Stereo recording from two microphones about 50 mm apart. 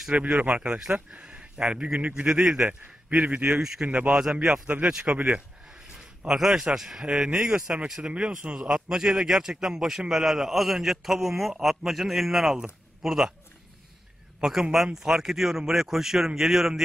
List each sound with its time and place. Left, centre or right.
0.1 s speech: right
2.2 s a man's voice: centre
4.1 s a man's voice: centre
5.9 s a sound: centre
6.7 s a man's voice: centre
7.2 s a man's voice: right
14.4 s a man's voice: centre